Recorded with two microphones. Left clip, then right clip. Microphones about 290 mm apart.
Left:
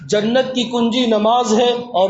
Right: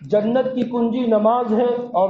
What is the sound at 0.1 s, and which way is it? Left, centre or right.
A man's voice, left.